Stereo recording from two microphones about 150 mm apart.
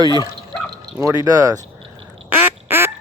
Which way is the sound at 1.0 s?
25° right (ahead or behind).